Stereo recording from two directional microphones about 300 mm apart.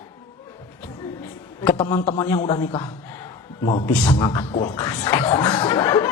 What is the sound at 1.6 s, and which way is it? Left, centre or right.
A man's voice, left.